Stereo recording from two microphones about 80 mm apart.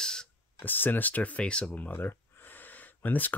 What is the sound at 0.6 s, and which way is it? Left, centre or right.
Speech, left.